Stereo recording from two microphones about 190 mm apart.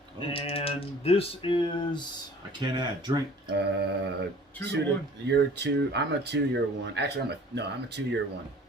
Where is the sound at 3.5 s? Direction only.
60° right (ahead or behind).